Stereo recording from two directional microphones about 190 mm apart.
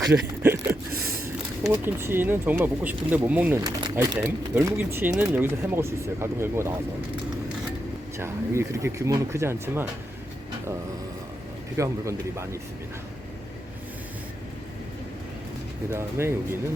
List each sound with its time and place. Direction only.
0.1 s speech: 10° right (ahead or behind)
8.2 s speech: 15° right (ahead or behind)
11.8 s speech: 15° right (ahead or behind)
15.9 s speech: 15° right (ahead or behind)